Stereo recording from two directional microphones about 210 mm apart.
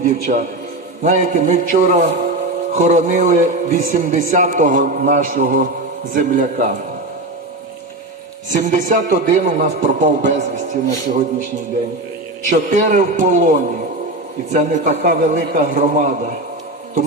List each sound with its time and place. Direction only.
0.0 s a man's voice: 35° right (ahead or behind)
8.4 s a man's voice: 40° right (ahead or behind)
12.5 s a man's voice: 35° right (ahead or behind)